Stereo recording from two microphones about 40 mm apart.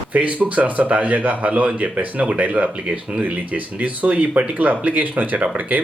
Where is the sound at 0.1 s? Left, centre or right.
Right.